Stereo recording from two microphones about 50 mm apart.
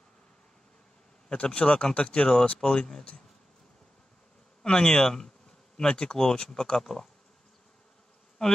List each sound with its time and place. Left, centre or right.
1.3 s speech: left
4.6 s speech: centre
8.4 s speech: left